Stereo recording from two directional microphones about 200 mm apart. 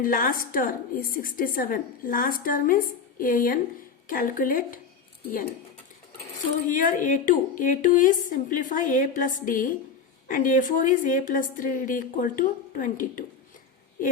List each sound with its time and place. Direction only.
0.0 s a woman's voice: 45° left (ahead or behind)
6.7 s a woman's voice: 40° left (ahead or behind)